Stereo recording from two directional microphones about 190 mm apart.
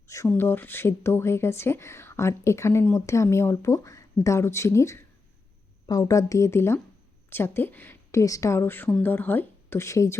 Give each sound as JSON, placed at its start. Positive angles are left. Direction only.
{"t": 0.1, "sound": "speech", "side_deg": 15}